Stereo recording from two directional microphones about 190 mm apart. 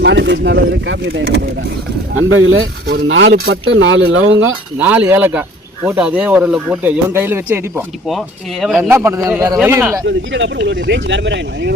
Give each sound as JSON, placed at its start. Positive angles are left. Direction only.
{"t": 0.0, "sound": "speech", "side_deg": -70}
{"t": 2.1, "sound": "speech", "side_deg": -90}
{"t": 4.8, "sound": "speech", "side_deg": -10}
{"t": 8.6, "sound": "speech", "side_deg": 0}
{"t": 8.9, "sound": "speech", "side_deg": -10}
{"t": 10.1, "sound": "speech", "side_deg": -70}